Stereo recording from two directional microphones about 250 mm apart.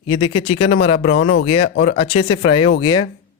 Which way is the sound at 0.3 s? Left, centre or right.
Left.